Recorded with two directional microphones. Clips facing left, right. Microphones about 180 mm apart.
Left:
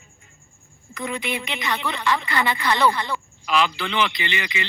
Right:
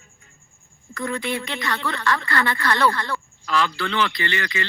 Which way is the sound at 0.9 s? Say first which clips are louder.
Right 2 dB; 20° left (ahead or behind).